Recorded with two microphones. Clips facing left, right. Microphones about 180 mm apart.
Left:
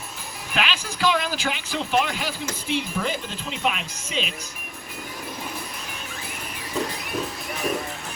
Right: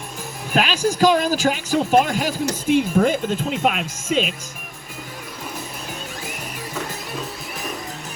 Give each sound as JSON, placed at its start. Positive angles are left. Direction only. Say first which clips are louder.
{"t": 0.5, "sound": "speech", "louder": "right 8 dB", "side_deg": -40}